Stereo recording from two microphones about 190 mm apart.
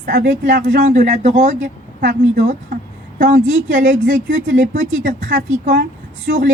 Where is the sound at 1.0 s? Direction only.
35° right (ahead or behind).